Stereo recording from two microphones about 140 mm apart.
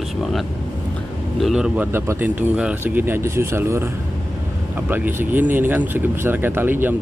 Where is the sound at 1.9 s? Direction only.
15° right (ahead or behind).